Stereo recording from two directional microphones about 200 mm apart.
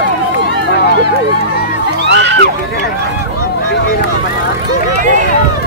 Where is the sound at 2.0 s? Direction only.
60° right (ahead or behind).